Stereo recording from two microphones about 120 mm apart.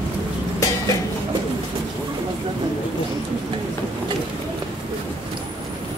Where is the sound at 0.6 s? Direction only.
30° left (ahead or behind).